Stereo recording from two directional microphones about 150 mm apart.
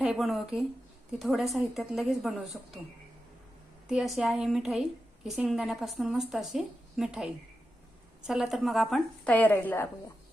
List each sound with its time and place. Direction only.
0.0 s a woman's voice: centre (ahead or behind)
3.8 s a woman's voice: centre (ahead or behind); by 9.9 s 15° left (ahead or behind)